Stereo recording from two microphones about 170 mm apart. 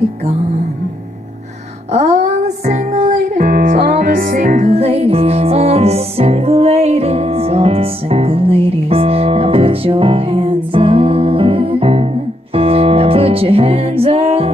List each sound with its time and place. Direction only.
1.9 s music: 40° right (ahead or behind)
3.4 s music: 55° right (ahead or behind)
4.6 s music: 35° right (ahead or behind)